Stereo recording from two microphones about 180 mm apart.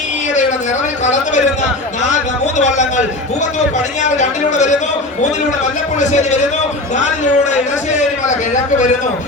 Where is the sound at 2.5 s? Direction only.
40° left (ahead or behind).